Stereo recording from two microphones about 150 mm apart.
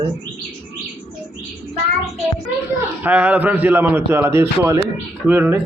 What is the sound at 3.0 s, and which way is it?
A man's voice, 10° right (ahead or behind).